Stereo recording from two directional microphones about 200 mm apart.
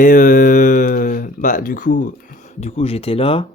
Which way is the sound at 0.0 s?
40° left (ahead or behind).